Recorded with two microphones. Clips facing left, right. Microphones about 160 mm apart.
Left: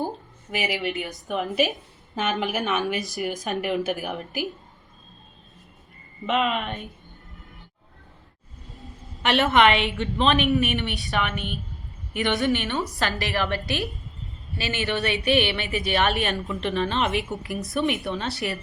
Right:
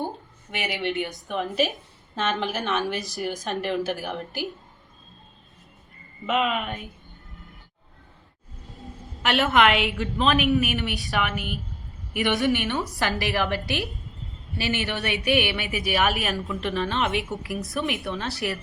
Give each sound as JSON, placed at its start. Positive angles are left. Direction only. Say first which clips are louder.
{"t": 0.5, "sound": "a woman's voice", "louder": "left 1 dB", "side_deg": 0}
{"t": 6.2, "sound": "a woman's voice", "louder": "left 1 dB", "side_deg": 0}
{"t": 8.7, "sound": "a woman's voice", "louder": "right 3 dB", "side_deg": 0}
{"t": 12.4, "sound": "a woman's voice", "louder": "even", "side_deg": -15}